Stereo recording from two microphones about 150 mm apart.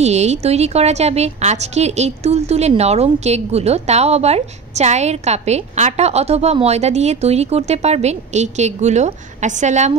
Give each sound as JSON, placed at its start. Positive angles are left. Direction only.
{"t": 0.0, "sound": "a woman's voice", "side_deg": -45}